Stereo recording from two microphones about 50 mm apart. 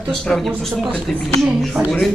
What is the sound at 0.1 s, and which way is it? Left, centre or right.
Speech, centre.